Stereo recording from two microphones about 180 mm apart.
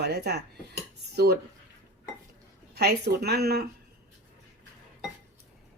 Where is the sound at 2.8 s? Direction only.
65° right (ahead or behind).